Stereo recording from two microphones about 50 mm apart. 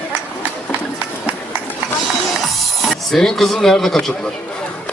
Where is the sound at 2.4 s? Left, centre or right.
Centre.